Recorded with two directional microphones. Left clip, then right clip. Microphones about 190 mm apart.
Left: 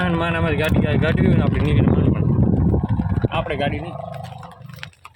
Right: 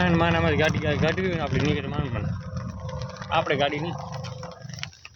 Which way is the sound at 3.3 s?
10° right (ahead or behind).